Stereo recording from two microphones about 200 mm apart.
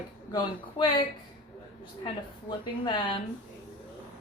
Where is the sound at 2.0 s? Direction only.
25° left (ahead or behind).